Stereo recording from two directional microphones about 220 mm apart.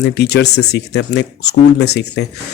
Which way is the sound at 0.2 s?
50° left (ahead or behind).